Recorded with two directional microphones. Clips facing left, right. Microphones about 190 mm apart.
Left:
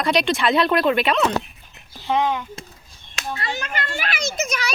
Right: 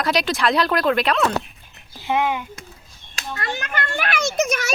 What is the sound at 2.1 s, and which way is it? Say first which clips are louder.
Speech: even; 10° right (ahead or behind).